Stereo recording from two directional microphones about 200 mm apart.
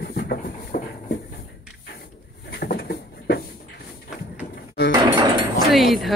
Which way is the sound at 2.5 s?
50° left (ahead or behind).